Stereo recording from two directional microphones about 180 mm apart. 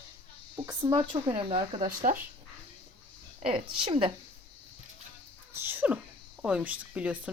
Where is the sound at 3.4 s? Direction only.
30° right (ahead or behind).